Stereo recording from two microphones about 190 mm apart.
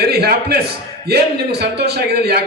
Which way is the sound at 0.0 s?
55° right (ahead or behind).